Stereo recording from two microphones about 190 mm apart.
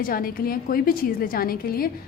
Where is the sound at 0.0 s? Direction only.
50° left (ahead or behind).